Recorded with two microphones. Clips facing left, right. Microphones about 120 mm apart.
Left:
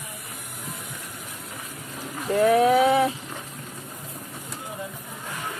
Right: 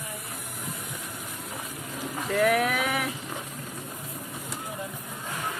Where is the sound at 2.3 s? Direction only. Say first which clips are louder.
Left 6 dB; 30° left (ahead or behind).